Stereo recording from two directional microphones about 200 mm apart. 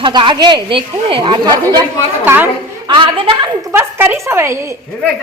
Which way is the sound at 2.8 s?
25° right (ahead or behind).